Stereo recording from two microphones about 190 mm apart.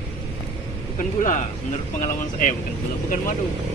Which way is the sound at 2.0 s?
45° left (ahead or behind).